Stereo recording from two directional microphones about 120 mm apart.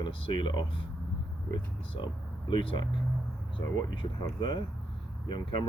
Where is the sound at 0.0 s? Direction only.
45° left (ahead or behind).